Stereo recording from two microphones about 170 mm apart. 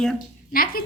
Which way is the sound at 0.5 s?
60° left (ahead or behind).